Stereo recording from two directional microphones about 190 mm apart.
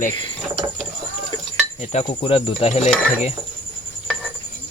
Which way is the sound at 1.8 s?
35° left (ahead or behind).